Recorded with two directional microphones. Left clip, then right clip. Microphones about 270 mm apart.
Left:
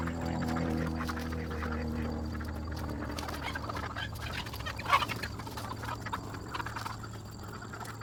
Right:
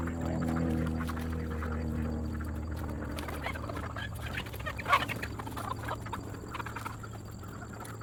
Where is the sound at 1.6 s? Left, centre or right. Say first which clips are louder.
Left 1 dB; left.